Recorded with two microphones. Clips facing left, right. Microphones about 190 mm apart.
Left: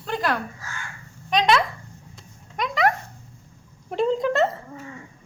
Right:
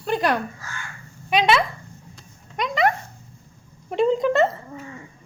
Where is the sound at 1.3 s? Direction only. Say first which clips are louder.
Right 1 dB; 5° right (ahead or behind).